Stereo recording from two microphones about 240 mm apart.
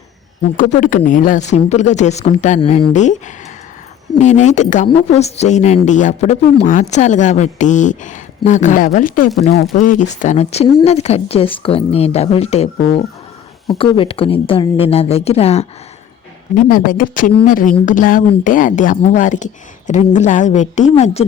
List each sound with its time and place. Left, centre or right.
0.5 s speech: left
16.6 s speech: left